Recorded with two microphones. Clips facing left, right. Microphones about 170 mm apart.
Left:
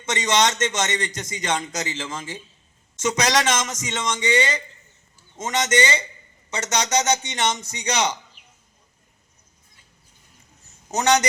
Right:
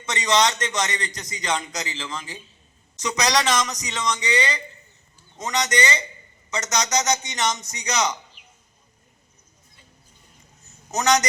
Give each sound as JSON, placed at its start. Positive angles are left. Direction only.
{"t": 0.2, "sound": "a man's voice", "side_deg": 25}
{"t": 10.9, "sound": "a man's voice", "side_deg": 30}